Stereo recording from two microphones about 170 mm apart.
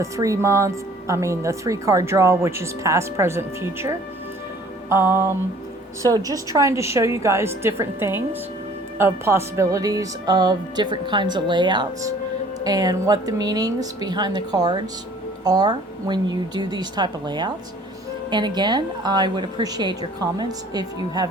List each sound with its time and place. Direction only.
0.0 s a woman's voice: 20° right (ahead or behind)